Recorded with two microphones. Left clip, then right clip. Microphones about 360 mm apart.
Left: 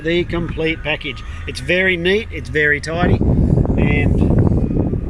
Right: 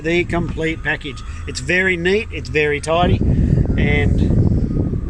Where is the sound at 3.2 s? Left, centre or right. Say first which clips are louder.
Left 3 dB; left.